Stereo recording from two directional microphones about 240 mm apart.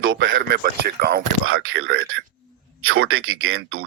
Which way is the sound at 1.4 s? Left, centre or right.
Right.